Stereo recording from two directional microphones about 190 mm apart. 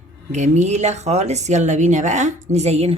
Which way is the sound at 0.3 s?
40° right (ahead or behind).